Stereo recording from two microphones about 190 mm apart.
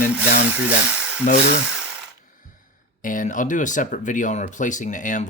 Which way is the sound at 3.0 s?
45° left (ahead or behind).